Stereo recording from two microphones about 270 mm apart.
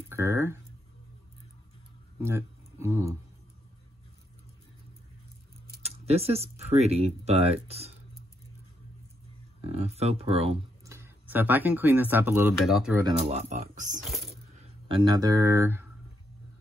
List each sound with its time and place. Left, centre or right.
0.1 s a sound: centre
2.2 s speech: centre
5.8 s speech: right
9.6 s speech: right
10.9 s speech: centre
13.0 s speech: right
14.9 s speech: centre